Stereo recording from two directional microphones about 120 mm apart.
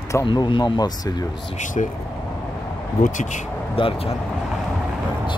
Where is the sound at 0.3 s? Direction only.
40° left (ahead or behind).